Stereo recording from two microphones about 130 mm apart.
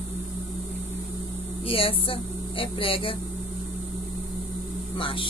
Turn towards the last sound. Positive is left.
turn(degrees=45)  # may be behind; listen again after turning